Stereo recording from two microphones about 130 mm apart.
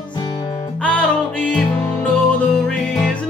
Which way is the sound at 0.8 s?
10° left (ahead or behind).